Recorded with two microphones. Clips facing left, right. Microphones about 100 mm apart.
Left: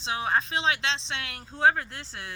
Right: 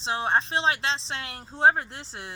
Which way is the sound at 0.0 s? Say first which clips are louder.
Right 2 dB; 30° right (ahead or behind).